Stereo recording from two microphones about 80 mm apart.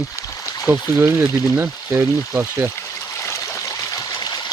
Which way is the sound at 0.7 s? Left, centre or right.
Right.